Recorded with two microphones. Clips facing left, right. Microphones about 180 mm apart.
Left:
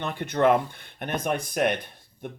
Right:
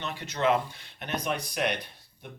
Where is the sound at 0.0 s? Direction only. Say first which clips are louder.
Left 6 dB; 55° left (ahead or behind).